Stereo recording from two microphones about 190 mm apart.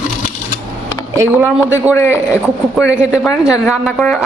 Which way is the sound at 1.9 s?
15° left (ahead or behind).